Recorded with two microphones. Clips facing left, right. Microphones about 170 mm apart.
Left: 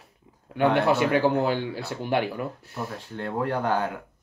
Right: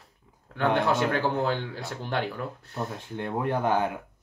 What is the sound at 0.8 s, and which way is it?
Speech, 15° left (ahead or behind).